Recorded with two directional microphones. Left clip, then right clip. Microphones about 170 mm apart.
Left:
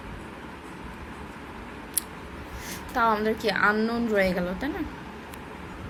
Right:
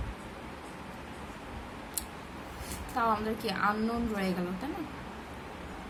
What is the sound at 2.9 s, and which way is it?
A woman's voice, 25° left (ahead or behind).